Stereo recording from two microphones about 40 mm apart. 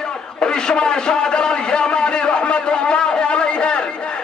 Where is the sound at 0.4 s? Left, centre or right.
Left.